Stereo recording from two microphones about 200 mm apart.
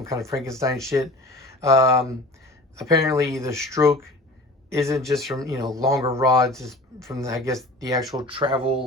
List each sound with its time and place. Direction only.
0.0 s speech: 15° right (ahead or behind)
5.1 s speech: centre (ahead or behind)
5.7 s speech: 15° right (ahead or behind)